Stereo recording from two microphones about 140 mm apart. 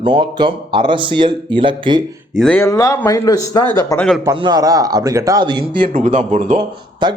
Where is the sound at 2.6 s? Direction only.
20° left (ahead or behind).